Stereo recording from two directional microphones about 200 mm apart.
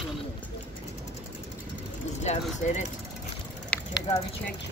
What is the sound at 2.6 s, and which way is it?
Speech, 35° left (ahead or behind).